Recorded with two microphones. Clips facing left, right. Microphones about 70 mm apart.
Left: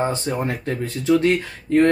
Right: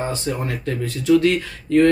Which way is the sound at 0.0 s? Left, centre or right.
Left.